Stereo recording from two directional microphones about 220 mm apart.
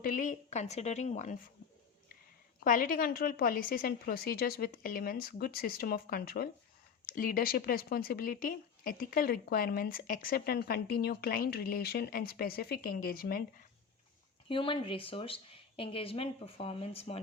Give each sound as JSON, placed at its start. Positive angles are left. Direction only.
{"t": 0.0, "sound": "a woman's voice", "side_deg": 35}
{"t": 2.6, "sound": "speech", "side_deg": 40}
{"t": 14.4, "sound": "a woman's voice", "side_deg": 25}